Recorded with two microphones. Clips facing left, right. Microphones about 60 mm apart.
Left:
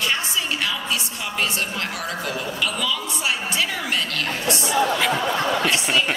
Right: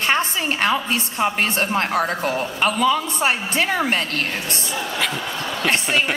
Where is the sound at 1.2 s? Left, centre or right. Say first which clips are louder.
Right 8 dB; right.